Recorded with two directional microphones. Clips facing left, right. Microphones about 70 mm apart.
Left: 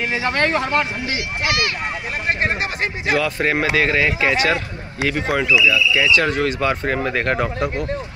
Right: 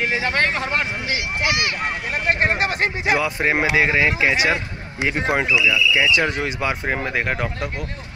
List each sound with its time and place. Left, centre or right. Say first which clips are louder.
0.1 s speech: left 2 dB; centre
2.4 s speech: right 3 dB; right
3.1 s a man's voice: left 2 dB; centre